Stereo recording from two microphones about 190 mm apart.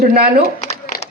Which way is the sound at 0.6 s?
35° left (ahead or behind).